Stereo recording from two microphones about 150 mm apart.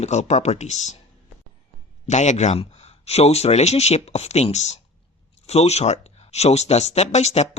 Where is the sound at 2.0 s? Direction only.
50° left (ahead or behind).